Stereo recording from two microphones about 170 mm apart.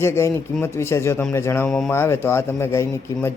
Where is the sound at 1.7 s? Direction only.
Centre (ahead or behind).